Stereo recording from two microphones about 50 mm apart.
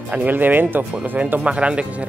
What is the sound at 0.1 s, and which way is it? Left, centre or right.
Speech, right.